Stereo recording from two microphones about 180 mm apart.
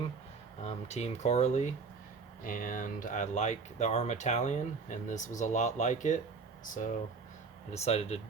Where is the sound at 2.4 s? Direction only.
50° left (ahead or behind).